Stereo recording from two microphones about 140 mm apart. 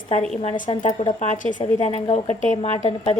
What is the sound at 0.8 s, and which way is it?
Speech, 50° left (ahead or behind).